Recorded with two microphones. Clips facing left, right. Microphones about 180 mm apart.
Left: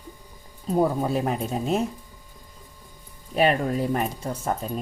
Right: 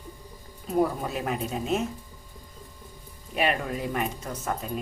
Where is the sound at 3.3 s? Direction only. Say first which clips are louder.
Left 5 dB; 35° left (ahead or behind).